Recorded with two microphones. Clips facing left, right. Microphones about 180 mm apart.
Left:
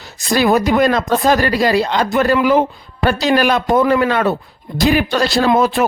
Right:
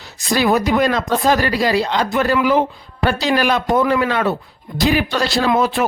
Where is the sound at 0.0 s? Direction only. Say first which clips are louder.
Left 2 dB; 45° left (ahead or behind).